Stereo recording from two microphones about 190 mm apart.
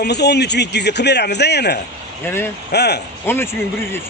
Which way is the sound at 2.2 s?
10° left (ahead or behind).